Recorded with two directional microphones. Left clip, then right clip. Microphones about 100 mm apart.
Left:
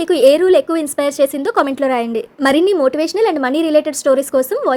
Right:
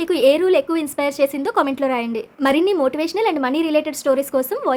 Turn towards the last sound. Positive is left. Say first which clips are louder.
# left 5 dB
turn(degrees=25)  # may be behind; listen again after turning